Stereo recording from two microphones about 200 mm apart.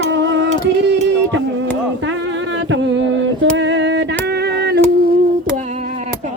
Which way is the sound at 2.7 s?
65° right (ahead or behind).